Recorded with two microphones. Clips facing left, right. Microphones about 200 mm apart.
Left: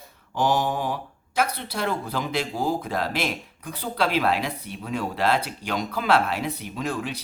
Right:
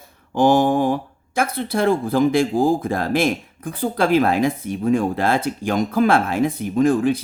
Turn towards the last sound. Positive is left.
turn(degrees=-50)  # may be behind; listen again after turning